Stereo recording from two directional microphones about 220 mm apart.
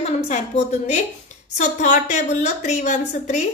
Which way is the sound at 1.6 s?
35° left (ahead or behind).